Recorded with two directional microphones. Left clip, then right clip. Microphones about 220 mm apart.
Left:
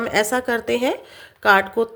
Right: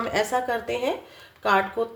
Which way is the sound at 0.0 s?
30° left (ahead or behind).